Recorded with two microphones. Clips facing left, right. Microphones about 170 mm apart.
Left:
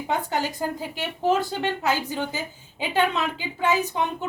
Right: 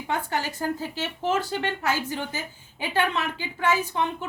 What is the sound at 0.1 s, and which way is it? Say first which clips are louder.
Speech: left 2 dB; 15° left (ahead or behind).